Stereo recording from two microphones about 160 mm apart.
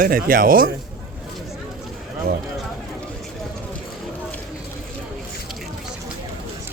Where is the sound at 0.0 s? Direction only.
65° right (ahead or behind).